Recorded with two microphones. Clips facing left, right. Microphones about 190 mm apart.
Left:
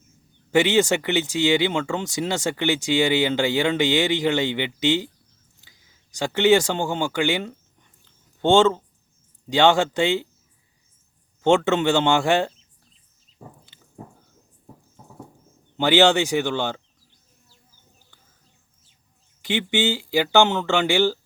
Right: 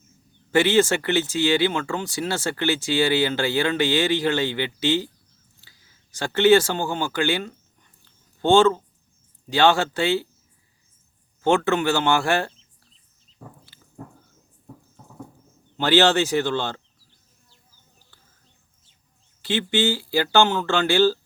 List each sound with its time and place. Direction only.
0.5 s speech: 15° left (ahead or behind)
11.4 s speech: 20° left (ahead or behind)
15.8 s speech: 15° left (ahead or behind)
19.4 s speech: 15° left (ahead or behind)